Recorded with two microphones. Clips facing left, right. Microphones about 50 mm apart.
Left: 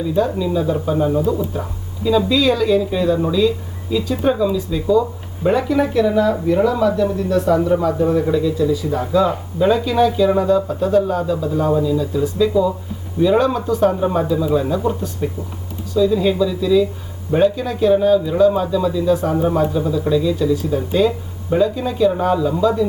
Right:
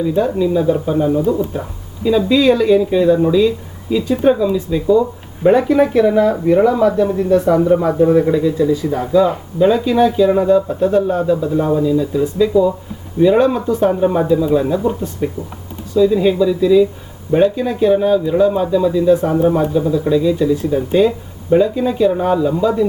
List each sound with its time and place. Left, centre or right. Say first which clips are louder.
0.1 s speech: right 1 dB; centre
2.0 s speech: right 3 dB; right
4.2 s speech: right 4 dB; centre; by 9.0 s right
9.0 s speech: right 3 dB; centre
13.9 s speech: right 4 dB; centre